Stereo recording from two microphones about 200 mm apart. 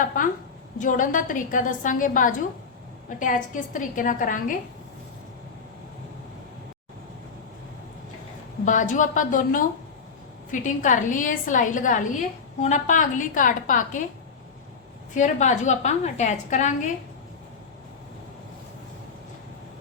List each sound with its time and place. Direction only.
0.1 s a woman's voice: 40° left (ahead or behind)
8.6 s a woman's voice: 40° left (ahead or behind)
15.1 s a woman's voice: 35° left (ahead or behind)